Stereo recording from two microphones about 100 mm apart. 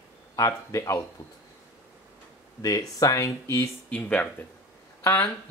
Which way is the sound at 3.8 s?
15° left (ahead or behind).